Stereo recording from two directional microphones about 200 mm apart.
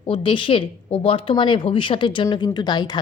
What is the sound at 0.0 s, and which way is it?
Speech, 25° left (ahead or behind).